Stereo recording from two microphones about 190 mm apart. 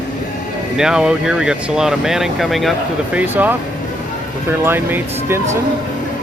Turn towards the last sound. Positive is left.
turn(degrees=-10)  # may be behind; listen again after turning